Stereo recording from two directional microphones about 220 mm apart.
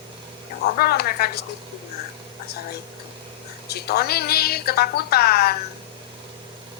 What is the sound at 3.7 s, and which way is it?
A woman's voice, 45° left (ahead or behind).